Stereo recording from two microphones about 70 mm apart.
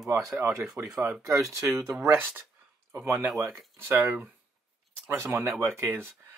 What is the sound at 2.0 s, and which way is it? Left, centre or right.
Speech, right.